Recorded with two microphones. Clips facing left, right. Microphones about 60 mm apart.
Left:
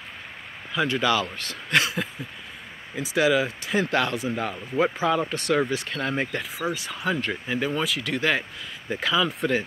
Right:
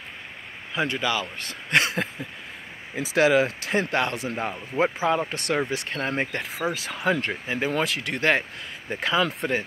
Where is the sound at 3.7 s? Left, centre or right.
Right.